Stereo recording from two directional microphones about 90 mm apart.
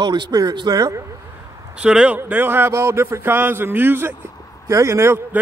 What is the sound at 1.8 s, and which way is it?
A man's voice, 10° right (ahead or behind).